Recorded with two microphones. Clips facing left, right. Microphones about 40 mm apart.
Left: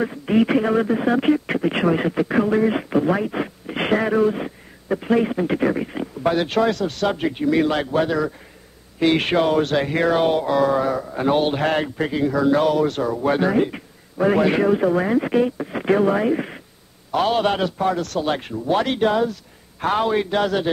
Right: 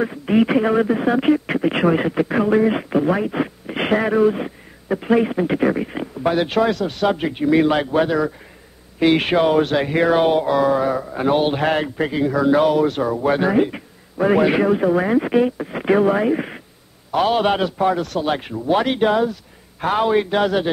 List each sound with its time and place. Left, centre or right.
0.0 s speech: centre